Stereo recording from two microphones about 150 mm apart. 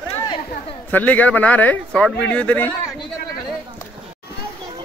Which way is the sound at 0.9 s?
10° left (ahead or behind).